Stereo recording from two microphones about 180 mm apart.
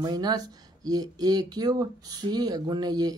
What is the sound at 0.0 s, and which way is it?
Speech, 20° right (ahead or behind).